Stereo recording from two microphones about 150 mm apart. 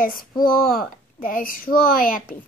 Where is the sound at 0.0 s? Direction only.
75° left (ahead or behind).